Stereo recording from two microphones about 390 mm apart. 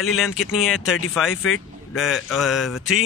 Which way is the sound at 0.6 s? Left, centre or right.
Centre.